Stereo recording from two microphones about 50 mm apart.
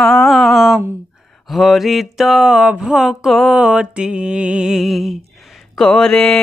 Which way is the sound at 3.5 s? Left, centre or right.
Centre.